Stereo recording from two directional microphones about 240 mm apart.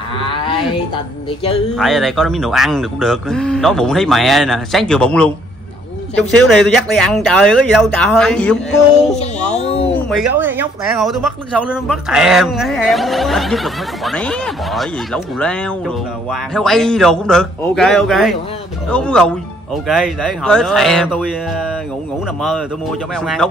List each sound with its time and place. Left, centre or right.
0.2 s roaring cats: left
1.8 s speech: centre
9.1 s music: left
10.0 s speech: centre